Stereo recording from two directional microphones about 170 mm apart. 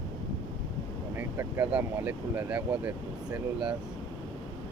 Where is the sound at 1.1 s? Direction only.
15° right (ahead or behind).